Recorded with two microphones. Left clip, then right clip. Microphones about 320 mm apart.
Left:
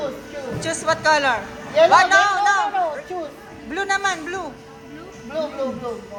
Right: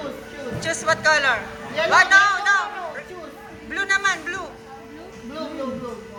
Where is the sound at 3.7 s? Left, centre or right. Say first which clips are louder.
Right 1 dB; centre.